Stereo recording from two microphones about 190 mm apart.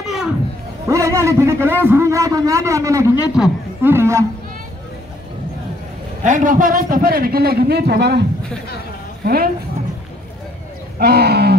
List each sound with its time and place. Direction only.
0.0 s a sound: centre (ahead or behind)
0.8 s a man's voice: 15° right (ahead or behind)
6.2 s a man's voice: 45° right (ahead or behind)
11.0 s speech: 55° right (ahead or behind)